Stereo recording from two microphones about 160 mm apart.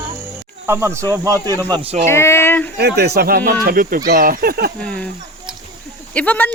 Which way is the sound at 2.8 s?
90° right.